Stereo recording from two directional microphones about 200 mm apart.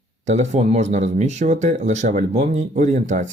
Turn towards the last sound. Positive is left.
turn(degrees=-35)  # may be behind; listen again after turning